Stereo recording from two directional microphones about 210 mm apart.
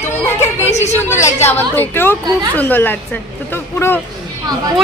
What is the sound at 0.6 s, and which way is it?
Speech, 35° left (ahead or behind).